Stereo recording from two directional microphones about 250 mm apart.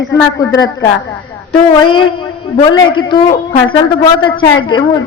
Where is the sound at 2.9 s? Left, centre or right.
Centre.